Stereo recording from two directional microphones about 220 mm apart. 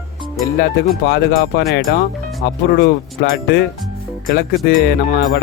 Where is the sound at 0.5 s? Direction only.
45° left (ahead or behind).